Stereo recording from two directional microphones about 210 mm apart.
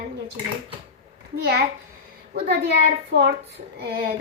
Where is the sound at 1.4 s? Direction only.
50° right (ahead or behind).